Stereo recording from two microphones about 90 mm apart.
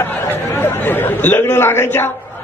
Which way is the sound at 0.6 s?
25° left (ahead or behind).